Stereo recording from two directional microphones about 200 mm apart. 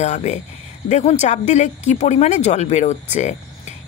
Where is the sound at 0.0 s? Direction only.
35° left (ahead or behind).